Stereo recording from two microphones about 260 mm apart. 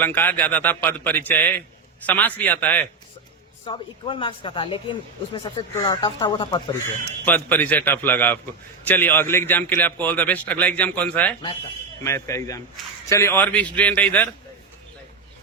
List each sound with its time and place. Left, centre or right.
0.0 s a man's voice: centre
3.7 s speech: centre
7.3 s a man's voice: centre